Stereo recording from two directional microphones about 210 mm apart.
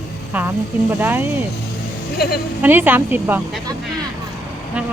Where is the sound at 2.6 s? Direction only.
10° right (ahead or behind).